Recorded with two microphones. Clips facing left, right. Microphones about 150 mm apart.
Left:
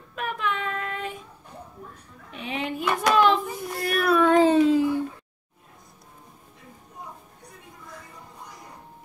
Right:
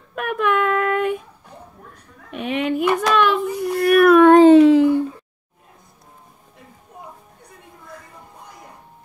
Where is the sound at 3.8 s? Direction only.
65° right (ahead or behind).